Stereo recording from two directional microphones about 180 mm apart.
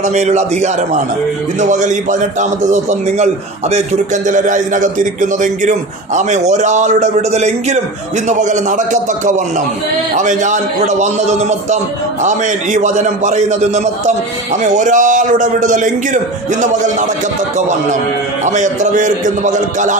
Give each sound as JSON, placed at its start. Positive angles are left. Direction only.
{"t": 0.0, "sound": "a man's voice", "side_deg": -40}
{"t": 3.7, "sound": "a man's voice", "side_deg": -45}
{"t": 6.1, "sound": "a man's voice", "side_deg": -40}
{"t": 18.4, "sound": "a man's voice", "side_deg": -45}